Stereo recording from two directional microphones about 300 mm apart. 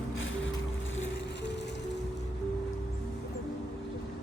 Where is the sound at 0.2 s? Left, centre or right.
Left.